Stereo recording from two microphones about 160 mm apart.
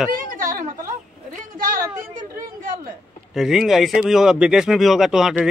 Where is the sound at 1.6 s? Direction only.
60° right (ahead or behind).